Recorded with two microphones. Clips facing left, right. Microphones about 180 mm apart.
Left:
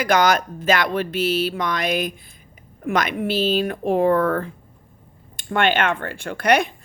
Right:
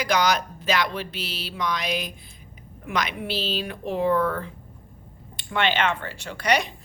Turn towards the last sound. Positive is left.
turn(degrees=55)  # may be behind; listen again after turning